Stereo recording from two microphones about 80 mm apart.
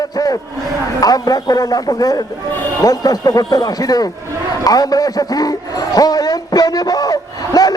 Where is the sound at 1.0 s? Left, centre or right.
Left.